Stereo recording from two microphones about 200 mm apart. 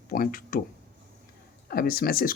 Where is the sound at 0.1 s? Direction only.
45° left (ahead or behind).